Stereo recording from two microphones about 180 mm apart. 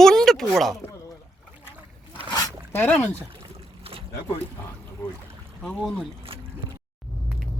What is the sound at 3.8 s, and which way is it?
Boat, 30° right (ahead or behind).